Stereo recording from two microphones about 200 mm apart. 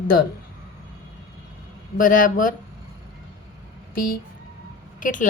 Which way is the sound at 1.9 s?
45° left (ahead or behind).